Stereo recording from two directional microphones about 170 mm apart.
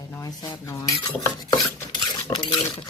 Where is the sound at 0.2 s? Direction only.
25° left (ahead or behind).